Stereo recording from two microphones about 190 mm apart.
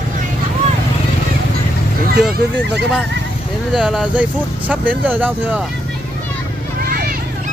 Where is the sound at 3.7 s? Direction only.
5° right (ahead or behind).